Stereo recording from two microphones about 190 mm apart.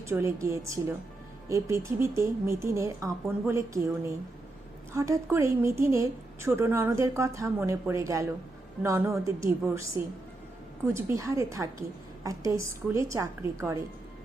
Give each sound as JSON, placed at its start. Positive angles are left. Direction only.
{"t": 0.0, "sound": "a woman's voice", "side_deg": -15}